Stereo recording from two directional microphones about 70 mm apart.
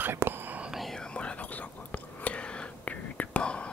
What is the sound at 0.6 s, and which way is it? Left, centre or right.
Whispering, centre.